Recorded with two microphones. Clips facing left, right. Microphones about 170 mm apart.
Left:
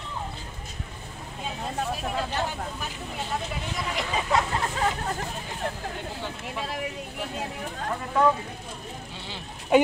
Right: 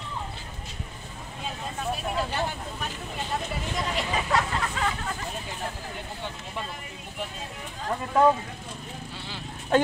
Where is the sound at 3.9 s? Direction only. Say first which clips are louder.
Left 2 dB; 20° left (ahead or behind).